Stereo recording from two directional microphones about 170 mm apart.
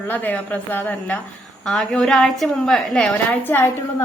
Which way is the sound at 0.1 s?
10° left (ahead or behind).